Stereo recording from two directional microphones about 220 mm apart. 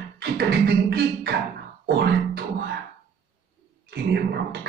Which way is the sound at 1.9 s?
50° right (ahead or behind).